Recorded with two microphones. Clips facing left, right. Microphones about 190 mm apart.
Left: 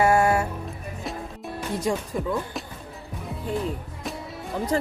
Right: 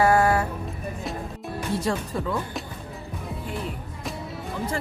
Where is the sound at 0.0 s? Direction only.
25° left (ahead or behind).